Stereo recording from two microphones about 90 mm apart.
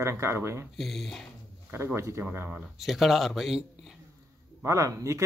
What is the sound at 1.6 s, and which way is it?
Speech, 25° right (ahead or behind).